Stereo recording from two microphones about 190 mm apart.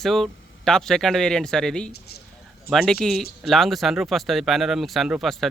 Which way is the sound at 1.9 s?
55° left (ahead or behind).